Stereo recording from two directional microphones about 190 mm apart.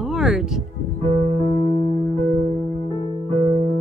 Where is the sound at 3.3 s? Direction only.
30° right (ahead or behind).